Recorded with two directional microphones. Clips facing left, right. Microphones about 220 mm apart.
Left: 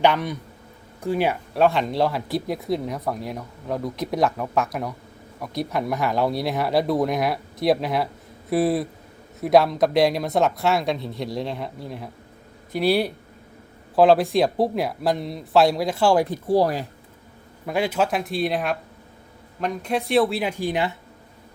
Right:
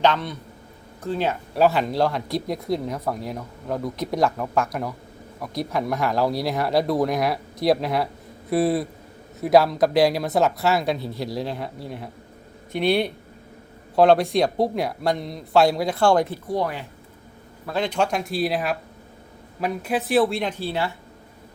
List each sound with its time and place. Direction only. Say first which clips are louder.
0.0 s a man's voice: left 1 dB; 10° left (ahead or behind)
1.5 s speech: right 1 dB; 5° right (ahead or behind)
16.5 s speech: left 6 dB; 35° left (ahead or behind)
17.7 s speech: left 1 dB; 10° left (ahead or behind)